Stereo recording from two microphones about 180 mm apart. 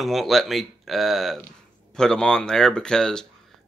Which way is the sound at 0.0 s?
Centre (ahead or behind).